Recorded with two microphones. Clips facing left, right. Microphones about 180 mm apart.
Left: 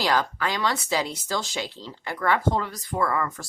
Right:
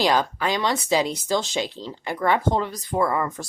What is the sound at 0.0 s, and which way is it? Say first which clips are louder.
Speech: right 3 dB; 20° right (ahead or behind).